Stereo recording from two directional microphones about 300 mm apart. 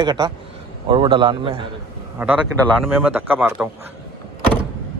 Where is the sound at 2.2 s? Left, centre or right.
Centre.